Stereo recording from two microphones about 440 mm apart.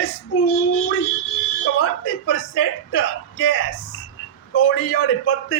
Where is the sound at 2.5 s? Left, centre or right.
Left.